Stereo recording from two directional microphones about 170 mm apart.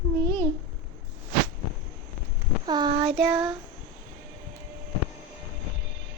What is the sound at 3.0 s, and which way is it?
Speech, centre (ahead or behind).